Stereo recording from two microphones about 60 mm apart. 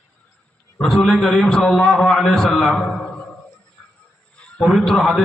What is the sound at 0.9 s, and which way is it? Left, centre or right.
A man's voice, centre.